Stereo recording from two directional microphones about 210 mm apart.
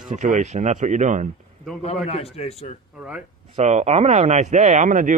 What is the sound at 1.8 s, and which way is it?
Speech, 30° left (ahead or behind).